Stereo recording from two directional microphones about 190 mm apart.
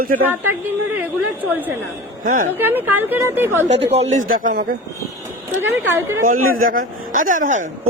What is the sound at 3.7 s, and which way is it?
Speech, 35° right (ahead or behind).